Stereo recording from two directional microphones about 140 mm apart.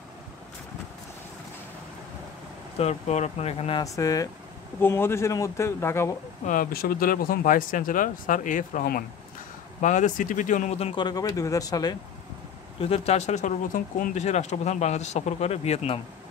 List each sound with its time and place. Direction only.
2.8 s speech: 50° left (ahead or behind)
3.8 s speech: 25° left (ahead or behind)
6.4 s speech: 80° left
9.8 s speech: 60° left (ahead or behind); by 11.1 s 45° left (ahead or behind)
11.1 s speech: 25° left (ahead or behind)
12.8 s speech: 45° left (ahead or behind); by 14.2 s 70° left (ahead or behind)
14.2 s speech: 55° left (ahead or behind)